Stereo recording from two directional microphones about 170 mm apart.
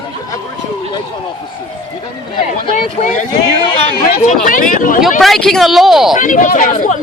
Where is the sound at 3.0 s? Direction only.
40° left (ahead or behind).